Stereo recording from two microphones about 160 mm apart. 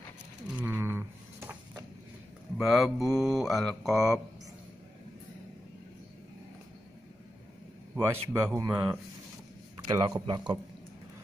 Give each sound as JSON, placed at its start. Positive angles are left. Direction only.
{"t": 0.6, "sound": "a sound", "side_deg": -15}
{"t": 2.5, "sound": "mantra", "side_deg": 0}
{"t": 8.0, "sound": "speech", "side_deg": -15}